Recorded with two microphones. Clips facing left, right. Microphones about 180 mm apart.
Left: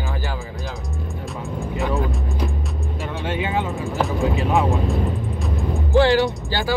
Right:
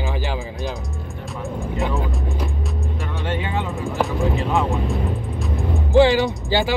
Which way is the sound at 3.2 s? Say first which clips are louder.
Left 2 dB; 10° left (ahead or behind).